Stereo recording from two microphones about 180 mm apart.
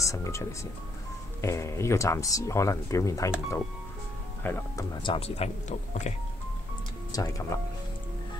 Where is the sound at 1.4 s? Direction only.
15° left (ahead or behind).